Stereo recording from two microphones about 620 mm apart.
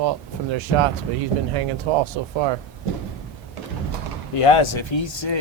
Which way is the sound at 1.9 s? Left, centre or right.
Right.